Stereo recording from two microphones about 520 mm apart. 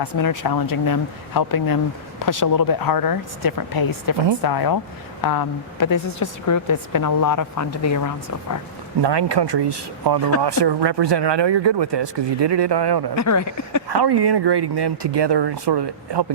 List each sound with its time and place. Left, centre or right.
0.0 s speech: left
9.0 s speech: right
13.1 s speech: left
13.8 s speech: right